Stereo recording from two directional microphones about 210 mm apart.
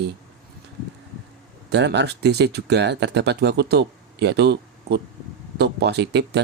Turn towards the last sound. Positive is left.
turn(degrees=-55)  # may be behind; listen again after turning